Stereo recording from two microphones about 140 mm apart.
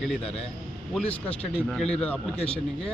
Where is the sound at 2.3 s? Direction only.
45° left (ahead or behind).